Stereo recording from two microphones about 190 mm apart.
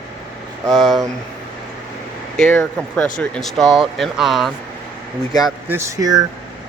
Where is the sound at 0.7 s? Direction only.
Centre (ahead or behind).